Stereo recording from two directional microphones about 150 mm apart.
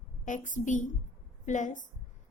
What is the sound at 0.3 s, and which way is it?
A woman's voice, 60° left (ahead or behind).